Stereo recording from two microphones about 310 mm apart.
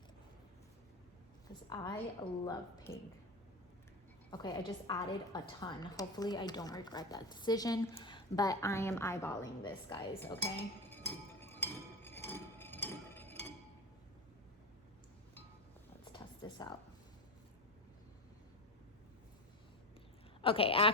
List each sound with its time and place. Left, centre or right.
1.7 s a woman's voice: centre
4.3 s a woman's voice: centre
10.2 s dishes: centre
16.1 s a sound: centre
20.4 s a woman's voice: centre